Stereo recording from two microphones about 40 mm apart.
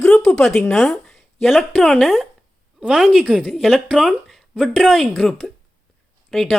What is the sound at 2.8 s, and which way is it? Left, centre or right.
Speech, centre.